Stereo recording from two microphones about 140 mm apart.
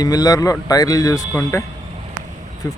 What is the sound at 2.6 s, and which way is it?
Speech, 25° left (ahead or behind).